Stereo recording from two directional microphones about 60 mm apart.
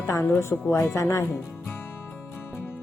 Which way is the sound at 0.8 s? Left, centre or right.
Left.